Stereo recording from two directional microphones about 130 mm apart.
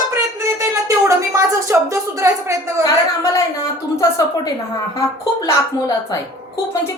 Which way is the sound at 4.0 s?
25° left (ahead or behind).